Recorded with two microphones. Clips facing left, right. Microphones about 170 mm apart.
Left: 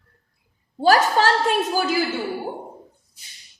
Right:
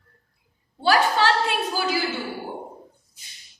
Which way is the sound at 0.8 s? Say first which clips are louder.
Left 3 dB; 45° left (ahead or behind).